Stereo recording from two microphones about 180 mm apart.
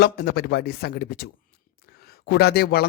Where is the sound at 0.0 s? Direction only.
60° left (ahead or behind).